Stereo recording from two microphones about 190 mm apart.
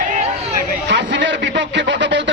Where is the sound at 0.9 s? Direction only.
70° right (ahead or behind).